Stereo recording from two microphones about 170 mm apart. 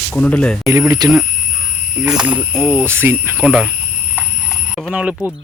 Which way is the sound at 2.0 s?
5° right (ahead or behind).